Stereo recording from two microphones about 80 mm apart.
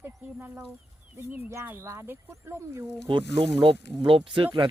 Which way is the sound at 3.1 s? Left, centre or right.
Right.